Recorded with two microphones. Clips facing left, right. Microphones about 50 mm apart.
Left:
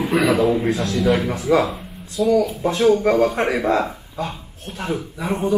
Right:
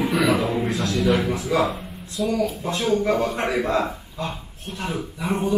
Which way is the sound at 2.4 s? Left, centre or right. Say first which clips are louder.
Left 6 dB; centre.